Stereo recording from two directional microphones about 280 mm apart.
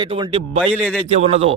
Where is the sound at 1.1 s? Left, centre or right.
Right.